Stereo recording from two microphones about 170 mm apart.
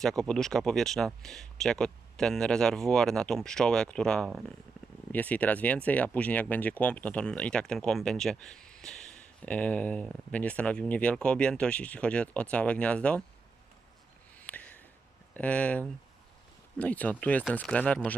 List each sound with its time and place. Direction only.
0.0 s speech: 5° left (ahead or behind)
14.4 s a sound: 10° left (ahead or behind)
15.4 s speech: 10° left (ahead or behind)